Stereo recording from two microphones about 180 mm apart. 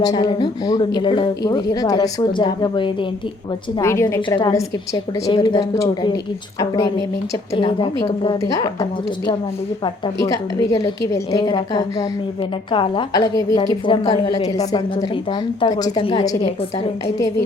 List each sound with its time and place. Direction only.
0.0 s a woman's voice: 20° left (ahead or behind)
3.8 s a woman's voice: 15° left (ahead or behind)
7.5 s a woman's voice: 30° left (ahead or behind)